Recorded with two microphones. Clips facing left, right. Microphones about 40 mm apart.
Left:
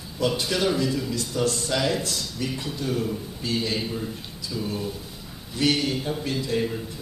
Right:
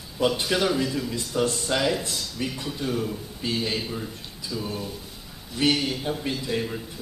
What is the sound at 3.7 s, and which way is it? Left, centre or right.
Speech, centre.